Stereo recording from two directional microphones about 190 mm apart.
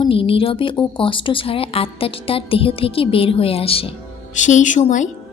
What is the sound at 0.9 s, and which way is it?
A woman's voice, 25° left (ahead or behind).